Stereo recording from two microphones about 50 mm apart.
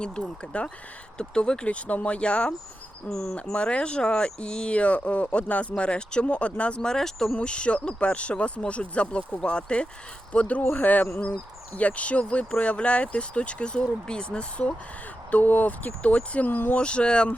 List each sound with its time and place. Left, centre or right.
0.5 s speech: left
3.1 s speech: centre
3.5 s speech: left
7.3 s speech: left
15.3 s speech: left
16.5 s speech: left
16.7 s speech: left